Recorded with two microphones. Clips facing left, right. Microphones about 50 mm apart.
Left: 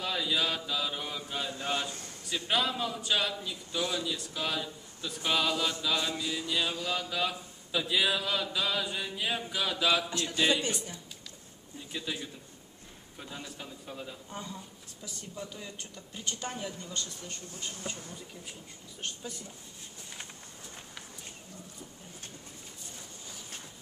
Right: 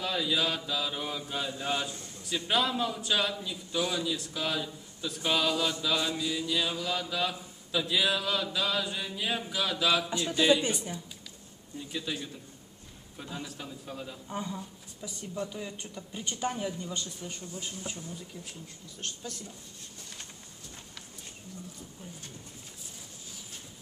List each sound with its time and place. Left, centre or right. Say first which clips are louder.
0.0 s mantra: right 1 dB; centre
10.5 s speech: right 5 dB; centre
11.9 s speech: right 1 dB; centre
13.2 s mantra: right 3 dB; centre
14.3 s speech: right 5 dB; centre
18.5 s speech: right 1 dB; centre